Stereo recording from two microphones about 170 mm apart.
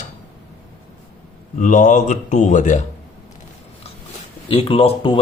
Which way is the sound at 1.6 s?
50° left (ahead or behind).